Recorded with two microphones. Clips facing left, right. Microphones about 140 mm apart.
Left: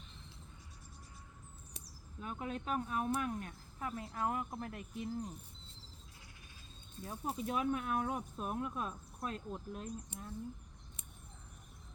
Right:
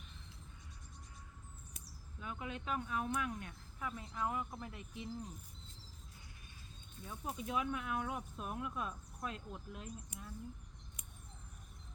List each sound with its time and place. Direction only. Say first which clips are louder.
2.2 s speech: left 3 dB; 40° left (ahead or behind)
7.0 s speech: left 4 dB; 35° left (ahead or behind)